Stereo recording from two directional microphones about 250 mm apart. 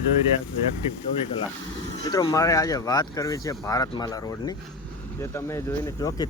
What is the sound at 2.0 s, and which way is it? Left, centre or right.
Speech, centre.